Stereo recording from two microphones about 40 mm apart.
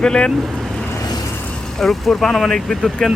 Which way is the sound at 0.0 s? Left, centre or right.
Left.